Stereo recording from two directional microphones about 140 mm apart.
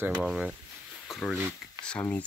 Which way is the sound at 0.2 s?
10° right (ahead or behind).